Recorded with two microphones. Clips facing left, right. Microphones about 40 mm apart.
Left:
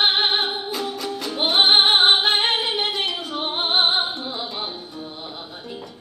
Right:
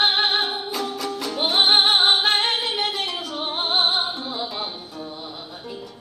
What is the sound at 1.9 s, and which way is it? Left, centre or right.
Music, left.